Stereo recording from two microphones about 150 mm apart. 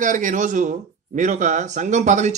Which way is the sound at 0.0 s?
60° right (ahead or behind).